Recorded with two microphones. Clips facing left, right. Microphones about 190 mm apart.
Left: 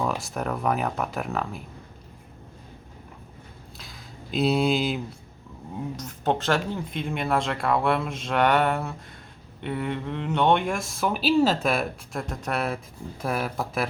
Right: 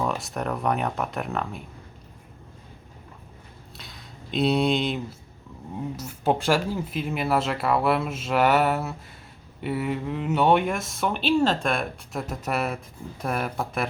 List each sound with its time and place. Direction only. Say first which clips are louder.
0.0 s speech: even; centre (ahead or behind)
3.8 s a sound: even; centre (ahead or behind)
5.7 s speech: right 1 dB; 5° right (ahead or behind)